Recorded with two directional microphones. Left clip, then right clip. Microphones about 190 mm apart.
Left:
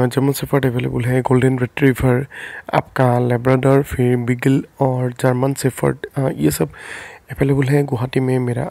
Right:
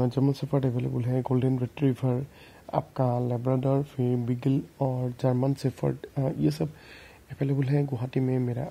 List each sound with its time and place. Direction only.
0.3 s speech: 35° left (ahead or behind)